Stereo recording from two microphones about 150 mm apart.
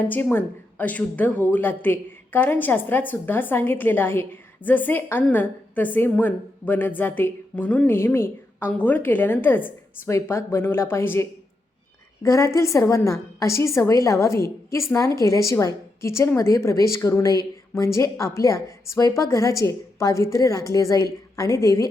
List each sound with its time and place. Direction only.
0.0 s a woman's voice: 15° left (ahead or behind)